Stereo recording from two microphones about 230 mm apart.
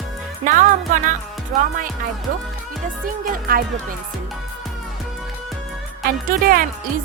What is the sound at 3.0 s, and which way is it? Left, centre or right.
Speech, right.